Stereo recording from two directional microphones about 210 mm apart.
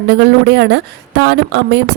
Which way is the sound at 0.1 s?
50° right (ahead or behind).